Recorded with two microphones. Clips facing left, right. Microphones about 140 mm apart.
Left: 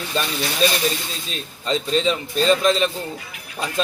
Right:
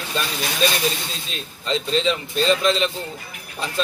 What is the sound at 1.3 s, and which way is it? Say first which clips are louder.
A man's voice: left 1 dB; 40° left (ahead or behind).